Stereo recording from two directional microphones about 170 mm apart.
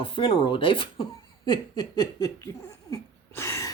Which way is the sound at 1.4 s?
25° left (ahead or behind).